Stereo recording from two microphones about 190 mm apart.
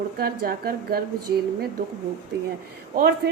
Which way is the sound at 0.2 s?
50° right (ahead or behind).